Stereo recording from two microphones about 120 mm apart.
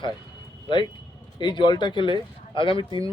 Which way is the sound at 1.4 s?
40° left (ahead or behind).